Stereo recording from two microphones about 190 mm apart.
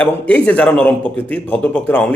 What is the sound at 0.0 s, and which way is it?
Speech, 5° left (ahead or behind).